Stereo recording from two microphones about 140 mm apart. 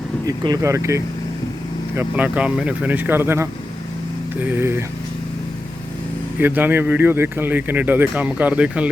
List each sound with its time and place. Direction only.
0.3 s speech: 25° right (ahead or behind)
6.4 s speech: 15° right (ahead or behind)